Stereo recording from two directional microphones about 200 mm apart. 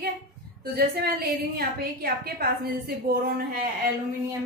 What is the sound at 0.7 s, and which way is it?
A woman's voice, 50° right (ahead or behind).